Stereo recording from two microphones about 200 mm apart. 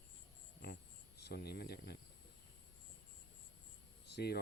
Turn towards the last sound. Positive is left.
turn(degrees=55)  # may be behind; listen again after turning